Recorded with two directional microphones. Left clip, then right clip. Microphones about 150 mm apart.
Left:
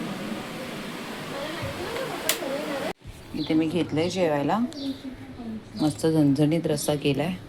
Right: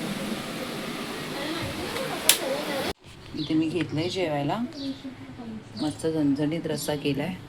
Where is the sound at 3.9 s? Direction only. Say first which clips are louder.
Left 3 dB; 15° left (ahead or behind).